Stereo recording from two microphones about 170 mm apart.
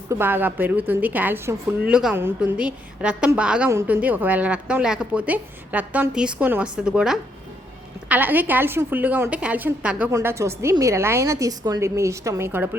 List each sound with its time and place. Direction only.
0.1 s a woman's voice: 10° right (ahead or behind)